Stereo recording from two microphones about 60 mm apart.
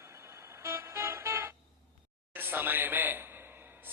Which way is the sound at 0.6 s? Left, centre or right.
Right.